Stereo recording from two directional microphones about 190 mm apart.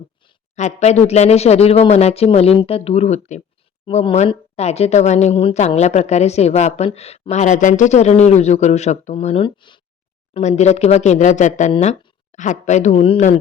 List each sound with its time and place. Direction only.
0.5 s speech: 35° left (ahead or behind)